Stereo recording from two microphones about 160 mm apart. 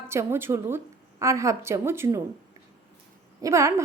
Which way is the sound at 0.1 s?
15° right (ahead or behind).